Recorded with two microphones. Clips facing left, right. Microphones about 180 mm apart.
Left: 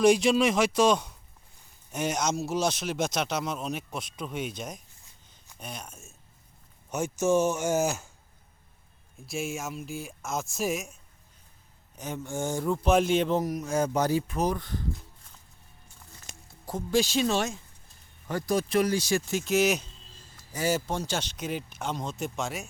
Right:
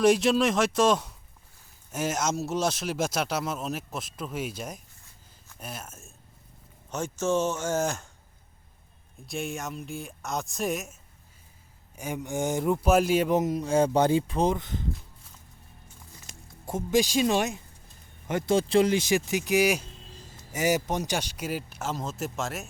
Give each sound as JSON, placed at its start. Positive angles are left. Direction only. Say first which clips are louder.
{"t": 0.0, "sound": "speech", "louder": "even", "side_deg": 0}
{"t": 6.9, "sound": "speech", "louder": "left 2 dB", "side_deg": 10}
{"t": 9.2, "sound": "speech", "louder": "even", "side_deg": 0}
{"t": 11.9, "sound": "speech", "louder": "right 2 dB", "side_deg": -10}
{"t": 12.8, "sound": "speech", "louder": "even", "side_deg": -5}
{"t": 13.4, "sound": "speech", "louder": "right 4 dB", "side_deg": -30}
{"t": 16.3, "sound": "music", "louder": "left 2 dB", "side_deg": 25}
{"t": 16.6, "sound": "speech", "louder": "right 2 dB", "side_deg": -20}
{"t": 20.3, "sound": "speech", "louder": "right 2 dB", "side_deg": -20}